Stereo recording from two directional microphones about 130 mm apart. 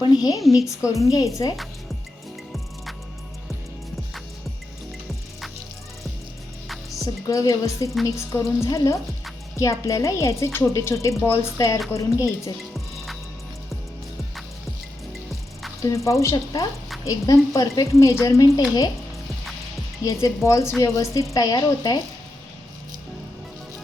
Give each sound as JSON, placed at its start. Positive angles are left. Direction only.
{"t": 0.0, "sound": "a woman's voice", "side_deg": 30}
{"t": 7.0, "sound": "a woman's voice", "side_deg": 25}
{"t": 12.5, "sound": "music", "side_deg": 0}
{"t": 15.8, "sound": "a woman's voice", "side_deg": 25}
{"t": 20.0, "sound": "a woman's voice", "side_deg": 25}